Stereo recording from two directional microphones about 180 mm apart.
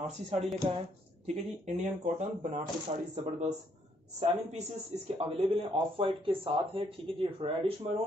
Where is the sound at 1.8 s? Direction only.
40° right (ahead or behind).